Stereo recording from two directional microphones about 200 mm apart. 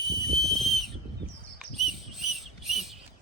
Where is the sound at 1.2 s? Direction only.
60° right (ahead or behind).